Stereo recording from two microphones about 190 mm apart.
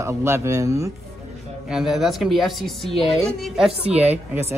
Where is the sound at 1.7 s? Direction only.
Centre (ahead or behind).